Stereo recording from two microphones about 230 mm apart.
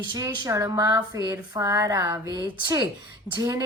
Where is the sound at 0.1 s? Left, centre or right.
Centre.